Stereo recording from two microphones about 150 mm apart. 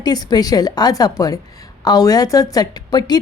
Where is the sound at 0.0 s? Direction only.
25° left (ahead or behind).